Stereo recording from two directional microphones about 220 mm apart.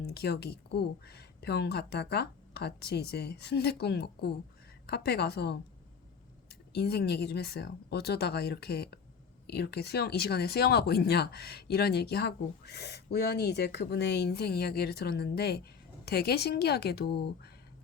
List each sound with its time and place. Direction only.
0.1 s speech: 50° left (ahead or behind)